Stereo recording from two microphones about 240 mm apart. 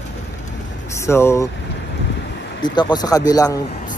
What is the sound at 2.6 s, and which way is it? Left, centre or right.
Speech, centre.